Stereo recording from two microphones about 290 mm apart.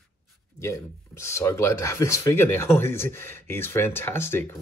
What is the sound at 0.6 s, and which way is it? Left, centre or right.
Speech, centre.